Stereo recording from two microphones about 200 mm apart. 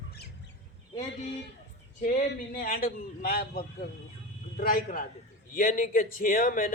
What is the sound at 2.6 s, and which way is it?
Speech, 45° left (ahead or behind).